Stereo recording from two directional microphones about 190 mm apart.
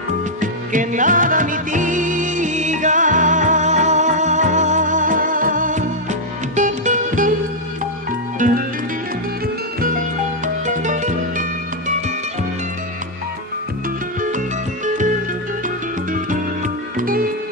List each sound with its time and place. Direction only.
0.4 s music: 40° right (ahead or behind)
8.4 s music: 45° right (ahead or behind)
10.4 s music: 40° right (ahead or behind)
16.1 s music: 45° right (ahead or behind)